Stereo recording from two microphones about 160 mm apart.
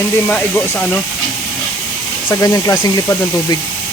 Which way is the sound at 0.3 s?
5° left (ahead or behind).